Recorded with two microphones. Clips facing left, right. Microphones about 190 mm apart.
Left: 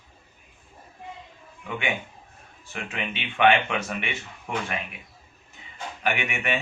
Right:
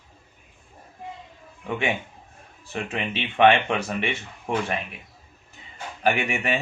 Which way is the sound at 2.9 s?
35° right (ahead or behind).